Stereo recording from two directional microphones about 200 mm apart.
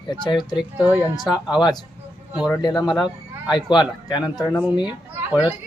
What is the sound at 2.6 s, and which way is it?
Speech, 20° left (ahead or behind).